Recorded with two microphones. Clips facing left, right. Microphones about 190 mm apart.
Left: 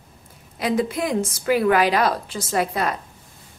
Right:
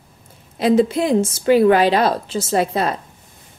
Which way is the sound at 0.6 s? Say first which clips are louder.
Right 7 dB; 25° right (ahead or behind).